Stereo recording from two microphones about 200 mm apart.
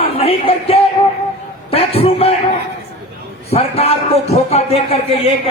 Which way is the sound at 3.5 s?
30° left (ahead or behind).